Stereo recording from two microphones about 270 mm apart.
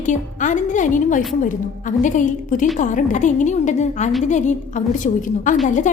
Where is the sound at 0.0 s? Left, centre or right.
Left.